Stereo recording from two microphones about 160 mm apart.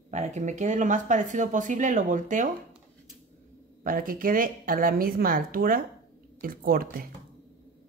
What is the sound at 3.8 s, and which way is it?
Speech, 60° right (ahead or behind).